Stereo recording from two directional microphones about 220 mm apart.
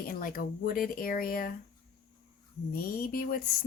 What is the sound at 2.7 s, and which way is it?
Speech, 40° left (ahead or behind).